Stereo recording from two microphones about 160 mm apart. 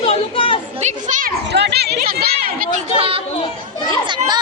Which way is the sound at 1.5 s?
90° right.